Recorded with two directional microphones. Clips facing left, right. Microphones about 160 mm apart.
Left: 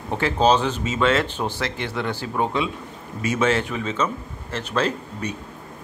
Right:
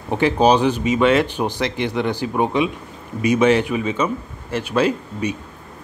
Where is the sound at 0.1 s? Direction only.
15° right (ahead or behind).